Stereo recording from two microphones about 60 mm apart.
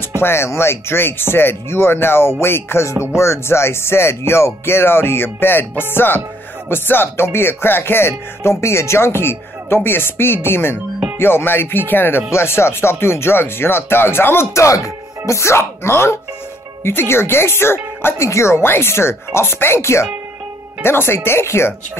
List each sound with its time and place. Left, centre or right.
0.1 s speech: left